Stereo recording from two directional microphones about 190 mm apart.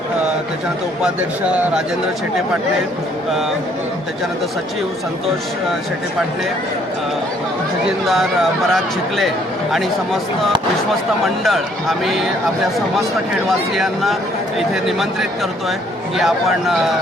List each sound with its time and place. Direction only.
1.0 s speech: 5° right (ahead or behind)
8.0 s speech: centre (ahead or behind)
13.5 s speech: centre (ahead or behind)